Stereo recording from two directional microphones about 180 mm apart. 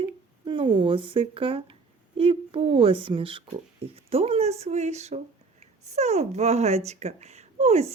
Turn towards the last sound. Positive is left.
turn(degrees=-35)  # may be behind; listen again after turning